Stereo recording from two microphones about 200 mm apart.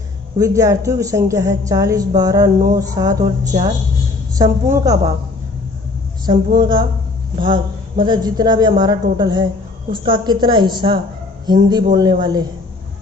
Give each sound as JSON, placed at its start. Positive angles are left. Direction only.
{"t": 0.3, "sound": "a woman's voice", "side_deg": -15}
{"t": 6.2, "sound": "a man's voice", "side_deg": -20}